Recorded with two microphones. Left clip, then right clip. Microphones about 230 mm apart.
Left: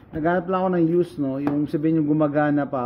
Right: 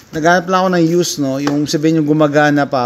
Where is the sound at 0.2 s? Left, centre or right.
Right.